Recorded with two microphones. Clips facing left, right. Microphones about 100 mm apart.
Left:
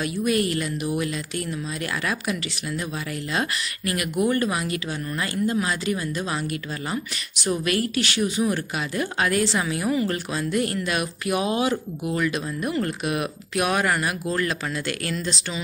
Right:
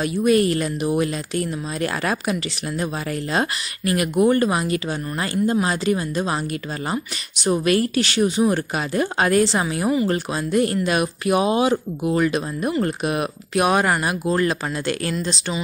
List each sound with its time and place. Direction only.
0.0 s speech: 35° right (ahead or behind)
3.3 s speech: 30° right (ahead or behind)
7.4 s speech: 30° right (ahead or behind)